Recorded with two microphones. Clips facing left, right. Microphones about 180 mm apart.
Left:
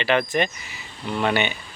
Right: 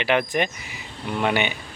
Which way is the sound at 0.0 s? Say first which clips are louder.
Left 1 dB; 15° right (ahead or behind).